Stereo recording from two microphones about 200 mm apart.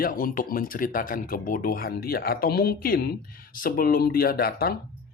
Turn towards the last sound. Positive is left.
turn(degrees=50)  # may be behind; listen again after turning